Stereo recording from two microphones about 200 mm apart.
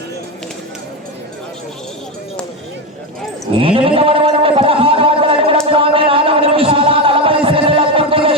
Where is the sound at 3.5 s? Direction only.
25° right (ahead or behind).